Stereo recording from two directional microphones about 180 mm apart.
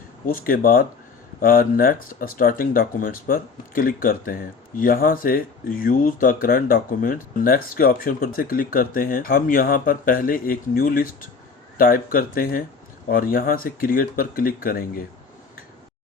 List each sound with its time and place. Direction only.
0.3 s speech: 50° left (ahead or behind)